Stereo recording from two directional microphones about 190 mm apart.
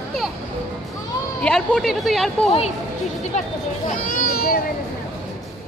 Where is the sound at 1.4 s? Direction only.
5° left (ahead or behind).